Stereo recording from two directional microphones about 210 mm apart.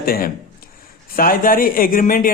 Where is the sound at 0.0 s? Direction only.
45° left (ahead or behind).